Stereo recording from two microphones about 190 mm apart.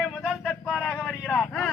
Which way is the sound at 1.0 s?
5° left (ahead or behind).